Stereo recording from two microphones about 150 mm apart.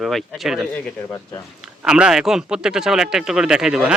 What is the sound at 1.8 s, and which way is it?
Speech, 5° right (ahead or behind).